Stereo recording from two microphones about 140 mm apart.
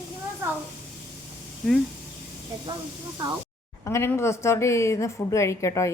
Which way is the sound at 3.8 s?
20° left (ahead or behind).